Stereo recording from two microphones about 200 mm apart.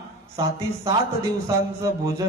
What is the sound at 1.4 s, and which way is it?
Speech, 15° right (ahead or behind).